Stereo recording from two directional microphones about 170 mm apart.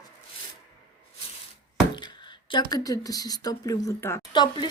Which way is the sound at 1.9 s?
25° left (ahead or behind).